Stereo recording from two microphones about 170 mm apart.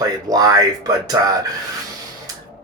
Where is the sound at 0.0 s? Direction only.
20° right (ahead or behind).